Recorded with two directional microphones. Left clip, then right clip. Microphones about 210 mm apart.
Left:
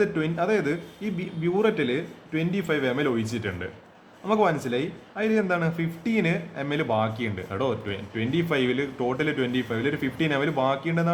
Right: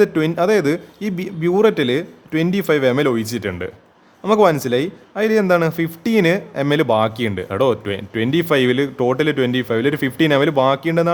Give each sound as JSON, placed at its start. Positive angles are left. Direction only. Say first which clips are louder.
{"t": 0.0, "sound": "a man's voice", "louder": "right 9 dB", "side_deg": -50}